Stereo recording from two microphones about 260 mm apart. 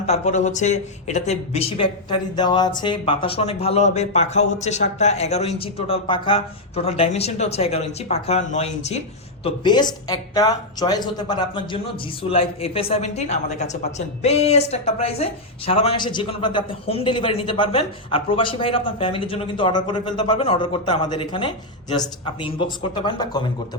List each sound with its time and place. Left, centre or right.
0.0 s a woman's voice: left